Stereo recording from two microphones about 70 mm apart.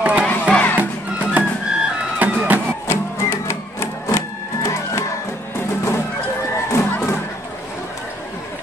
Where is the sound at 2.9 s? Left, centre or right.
Left.